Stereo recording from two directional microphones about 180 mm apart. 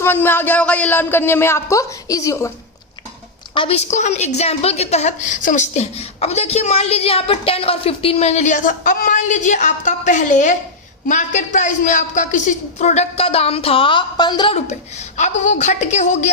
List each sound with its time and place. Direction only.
0.0 s speech: 10° left (ahead or behind)
3.5 s speech: 30° left (ahead or behind)